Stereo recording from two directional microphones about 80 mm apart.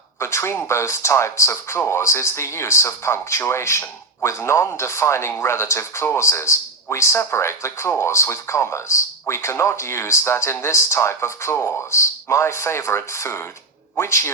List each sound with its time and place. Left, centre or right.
0.2 s a man's voice: left